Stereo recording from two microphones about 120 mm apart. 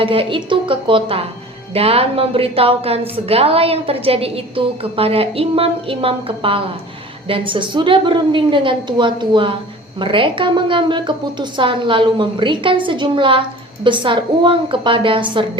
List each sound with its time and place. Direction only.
0.0 s a woman's voice: 50° right (ahead or behind)